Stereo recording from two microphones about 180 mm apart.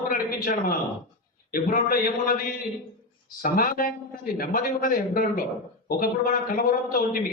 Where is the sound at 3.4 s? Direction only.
55° left (ahead or behind).